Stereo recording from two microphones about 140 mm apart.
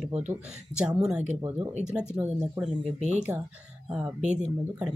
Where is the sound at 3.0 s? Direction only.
55° right (ahead or behind).